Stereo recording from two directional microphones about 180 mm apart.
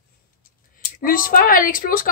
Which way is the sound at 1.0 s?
50° left (ahead or behind).